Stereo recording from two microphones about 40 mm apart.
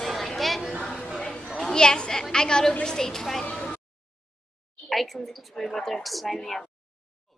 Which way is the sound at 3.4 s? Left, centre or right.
Left.